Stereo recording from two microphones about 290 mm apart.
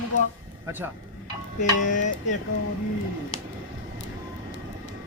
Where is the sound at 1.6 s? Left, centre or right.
Left.